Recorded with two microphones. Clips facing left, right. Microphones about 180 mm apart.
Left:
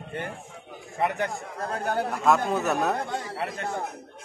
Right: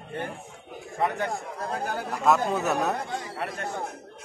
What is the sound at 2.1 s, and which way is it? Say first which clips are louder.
Speech: right 1 dB; centre (ahead or behind).